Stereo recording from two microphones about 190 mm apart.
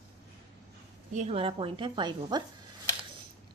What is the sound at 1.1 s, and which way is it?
Speech, 35° right (ahead or behind).